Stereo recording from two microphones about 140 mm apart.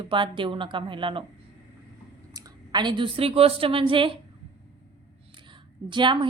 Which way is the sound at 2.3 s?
30° right (ahead or behind).